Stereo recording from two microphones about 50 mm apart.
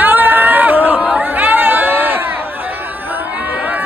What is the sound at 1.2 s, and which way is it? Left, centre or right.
Chatter, right.